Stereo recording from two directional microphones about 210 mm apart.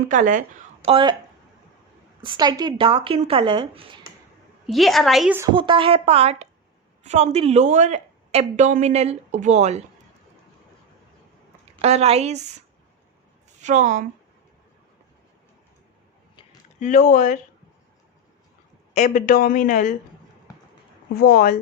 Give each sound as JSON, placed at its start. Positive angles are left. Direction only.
{"t": 0.1, "sound": "a woman's voice", "side_deg": -40}
{"t": 0.9, "sound": "speech", "side_deg": -25}
{"t": 2.2, "sound": "speech", "side_deg": -20}
{"t": 4.6, "sound": "a woman's voice", "side_deg": 0}
{"t": 5.5, "sound": "a woman's voice", "side_deg": -25}
{"t": 11.8, "sound": "a woman's voice", "side_deg": -30}
{"t": 13.6, "sound": "a woman's voice", "side_deg": -35}
{"t": 16.3, "sound": "a sound", "side_deg": 20}
{"t": 16.8, "sound": "speech", "side_deg": 40}
{"t": 18.9, "sound": "speech", "side_deg": 40}
{"t": 21.2, "sound": "speech", "side_deg": 45}